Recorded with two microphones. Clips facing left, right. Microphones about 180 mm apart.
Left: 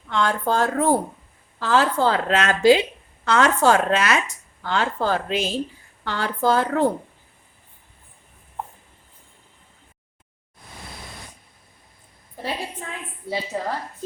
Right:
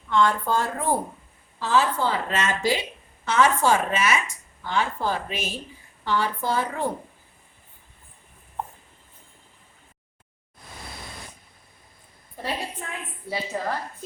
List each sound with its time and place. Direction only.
0.1 s a woman's voice: 85° left
3.3 s a woman's voice: 80° left
4.6 s a woman's voice: 90° left
13.5 s a woman's voice: 20° left (ahead or behind)